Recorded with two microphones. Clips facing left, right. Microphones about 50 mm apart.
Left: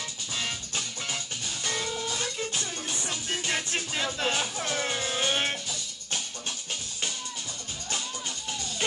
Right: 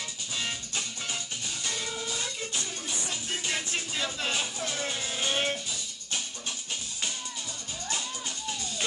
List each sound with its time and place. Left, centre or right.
0.4 s music: left